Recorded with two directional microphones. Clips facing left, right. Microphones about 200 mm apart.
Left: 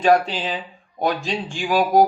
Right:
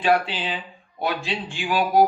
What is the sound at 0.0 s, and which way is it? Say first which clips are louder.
A man's voice: left 4 dB; 40° left (ahead or behind).